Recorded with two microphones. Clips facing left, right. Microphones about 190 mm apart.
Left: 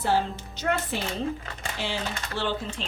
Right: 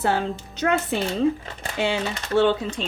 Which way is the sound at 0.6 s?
75° right (ahead or behind).